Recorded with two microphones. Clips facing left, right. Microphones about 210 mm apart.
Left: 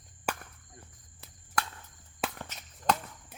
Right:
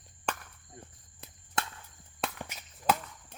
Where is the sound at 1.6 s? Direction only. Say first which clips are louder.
Left 1 dB; 25° right (ahead or behind).